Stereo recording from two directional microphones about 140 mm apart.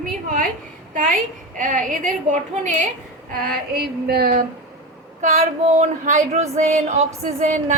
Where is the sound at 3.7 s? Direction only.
90° right.